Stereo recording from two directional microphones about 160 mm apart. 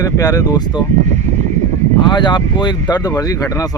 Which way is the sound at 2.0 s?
30° left (ahead or behind).